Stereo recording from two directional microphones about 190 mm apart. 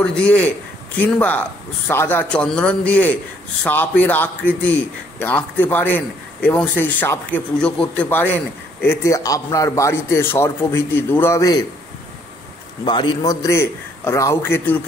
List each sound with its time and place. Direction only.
0.0 s a man's voice: 5° left (ahead or behind)
12.8 s a man's voice: 25° left (ahead or behind)